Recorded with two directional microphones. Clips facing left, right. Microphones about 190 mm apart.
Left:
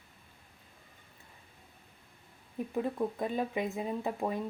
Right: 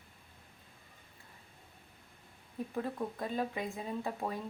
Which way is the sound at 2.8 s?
15° left (ahead or behind).